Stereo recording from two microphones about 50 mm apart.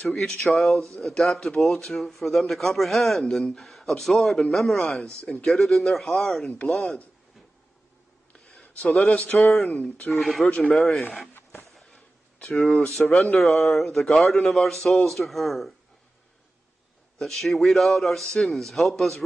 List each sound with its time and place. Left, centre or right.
0.1 s speech: centre
5.2 s speech: centre
5.5 s speech: centre
8.5 s speech: centre
9.1 s speech: left
9.4 s speech: centre
9.7 s speech: left
10.1 s speech: centre
11.8 s a sound: centre
12.5 s speech: centre
17.2 s speech: centre